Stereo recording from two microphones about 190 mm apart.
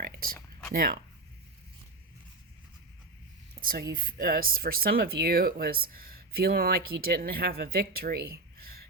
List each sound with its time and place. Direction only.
0.0 s a sound: 50° right (ahead or behind)
0.7 s speech: 50° right (ahead or behind)
3.6 s speech: 50° right (ahead or behind)